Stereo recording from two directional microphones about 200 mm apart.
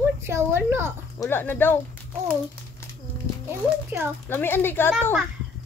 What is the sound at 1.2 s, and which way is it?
Speech, 10° left (ahead or behind).